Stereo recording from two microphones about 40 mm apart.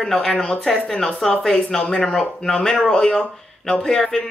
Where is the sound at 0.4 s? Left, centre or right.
Centre.